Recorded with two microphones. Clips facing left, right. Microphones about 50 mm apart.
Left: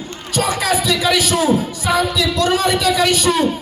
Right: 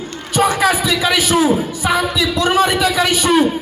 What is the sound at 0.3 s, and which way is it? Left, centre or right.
A man's voice, right.